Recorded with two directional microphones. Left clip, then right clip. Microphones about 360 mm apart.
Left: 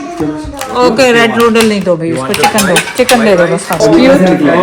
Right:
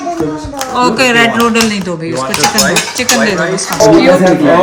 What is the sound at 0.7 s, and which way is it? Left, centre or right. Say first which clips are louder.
Speech: left 3 dB; centre.